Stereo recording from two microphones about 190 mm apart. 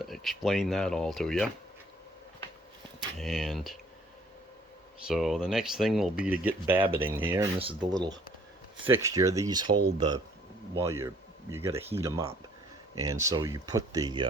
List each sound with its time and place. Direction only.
0.0 s speech: centre (ahead or behind)
3.2 s speech: centre (ahead or behind)
5.0 s speech: centre (ahead or behind); by 14.3 s 20° right (ahead or behind)